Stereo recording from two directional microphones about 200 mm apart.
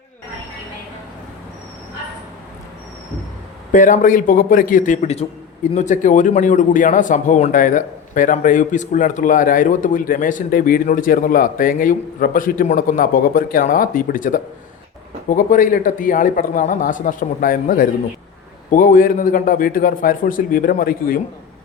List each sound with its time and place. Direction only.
3.7 s a man's voice: 40° left (ahead or behind)